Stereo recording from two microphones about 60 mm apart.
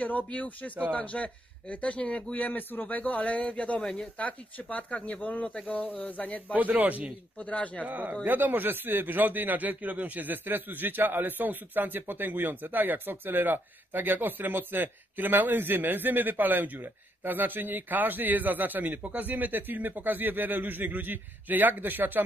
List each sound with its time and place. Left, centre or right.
0.3 s speech: left
3.8 s speech: centre
4.2 s speech: left
6.5 s a man's voice: right
7.3 s speech: left
7.8 s speech: right